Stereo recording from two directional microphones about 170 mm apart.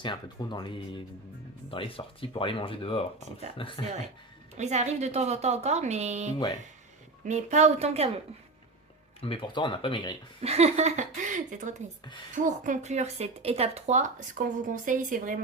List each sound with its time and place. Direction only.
0.0 s speech: 25° left (ahead or behind)
4.5 s a woman's voice: 40° right (ahead or behind)
9.2 s speech: 30° left (ahead or behind)
10.4 s a woman's voice: 40° right (ahead or behind)